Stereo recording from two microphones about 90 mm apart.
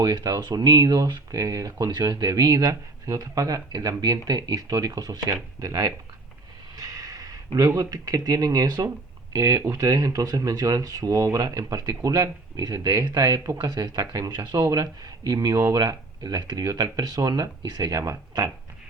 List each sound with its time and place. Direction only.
0.0 s speech: 45° right (ahead or behind)